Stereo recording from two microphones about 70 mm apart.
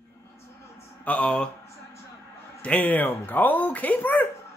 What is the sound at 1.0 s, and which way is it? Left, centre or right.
Speech, centre.